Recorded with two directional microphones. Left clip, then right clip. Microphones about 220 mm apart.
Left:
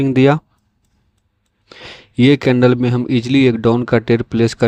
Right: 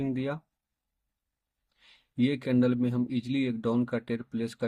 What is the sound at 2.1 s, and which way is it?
A man's voice, 45° left (ahead or behind).